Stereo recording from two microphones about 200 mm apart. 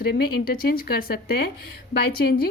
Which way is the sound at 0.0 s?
50° left (ahead or behind).